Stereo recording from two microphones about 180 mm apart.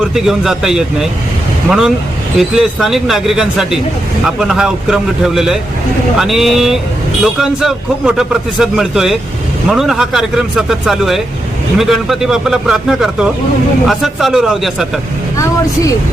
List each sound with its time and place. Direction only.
0.0 s a man's voice: centre (ahead or behind)
2.4 s a man's voice: centre (ahead or behind)
15.4 s speech: 20° left (ahead or behind)